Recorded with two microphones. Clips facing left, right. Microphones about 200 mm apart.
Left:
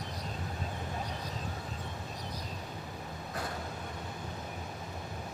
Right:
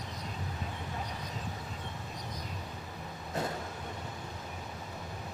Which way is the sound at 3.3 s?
25° right (ahead or behind).